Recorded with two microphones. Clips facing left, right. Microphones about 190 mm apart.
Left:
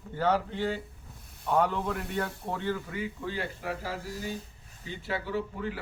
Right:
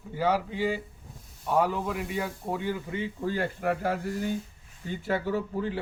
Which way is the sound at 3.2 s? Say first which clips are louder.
Right 6 dB; 45° right (ahead or behind).